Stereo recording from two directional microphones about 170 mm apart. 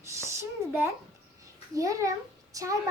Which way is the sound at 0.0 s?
15° right (ahead or behind).